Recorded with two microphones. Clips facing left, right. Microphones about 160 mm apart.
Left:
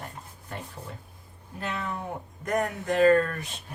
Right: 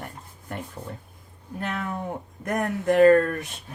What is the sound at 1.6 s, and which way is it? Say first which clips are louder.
Speech: right 3 dB; 55° right (ahead or behind).